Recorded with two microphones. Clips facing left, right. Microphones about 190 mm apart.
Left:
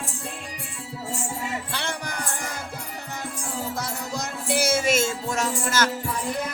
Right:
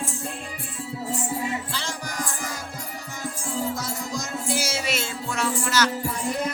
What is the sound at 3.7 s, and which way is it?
Music, 60° left (ahead or behind).